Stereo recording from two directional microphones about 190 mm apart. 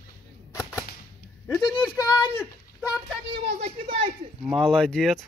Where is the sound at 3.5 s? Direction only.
45° right (ahead or behind).